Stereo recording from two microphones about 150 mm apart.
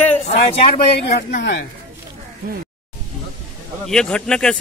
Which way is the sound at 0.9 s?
90° left.